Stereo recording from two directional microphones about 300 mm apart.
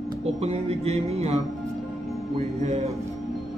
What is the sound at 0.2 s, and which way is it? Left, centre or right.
Speech, right.